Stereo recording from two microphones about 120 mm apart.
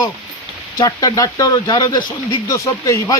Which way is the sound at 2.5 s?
25° left (ahead or behind).